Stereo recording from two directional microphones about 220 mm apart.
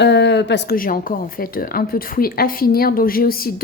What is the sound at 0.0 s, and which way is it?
A woman's voice, 50° left (ahead or behind).